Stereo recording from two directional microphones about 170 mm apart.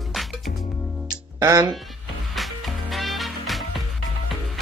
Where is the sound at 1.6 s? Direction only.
Centre (ahead or behind).